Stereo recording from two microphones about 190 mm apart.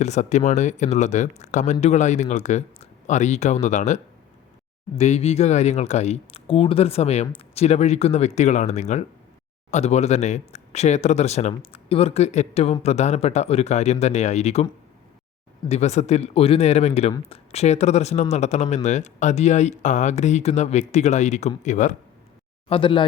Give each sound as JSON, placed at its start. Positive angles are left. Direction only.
{"t": 0.0, "sound": "speech", "side_deg": 35}
{"t": 15.7, "sound": "speech", "side_deg": 35}
{"t": 22.7, "sound": "speech", "side_deg": 25}